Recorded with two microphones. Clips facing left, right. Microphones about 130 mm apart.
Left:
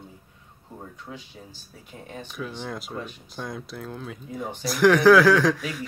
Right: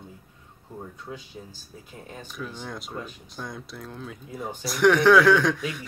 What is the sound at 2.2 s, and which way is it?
Speech, centre (ahead or behind).